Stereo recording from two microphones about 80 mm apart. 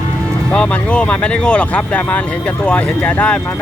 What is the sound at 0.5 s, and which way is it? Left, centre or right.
Speech, centre.